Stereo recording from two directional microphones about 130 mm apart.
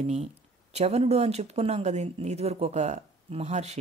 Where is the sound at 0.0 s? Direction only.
55° right (ahead or behind).